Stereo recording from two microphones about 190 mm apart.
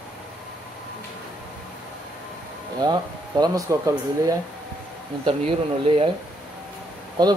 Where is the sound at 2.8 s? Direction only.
20° right (ahead or behind).